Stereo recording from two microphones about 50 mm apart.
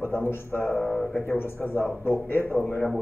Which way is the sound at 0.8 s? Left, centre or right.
Left.